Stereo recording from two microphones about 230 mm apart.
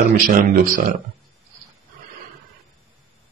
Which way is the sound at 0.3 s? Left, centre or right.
Right.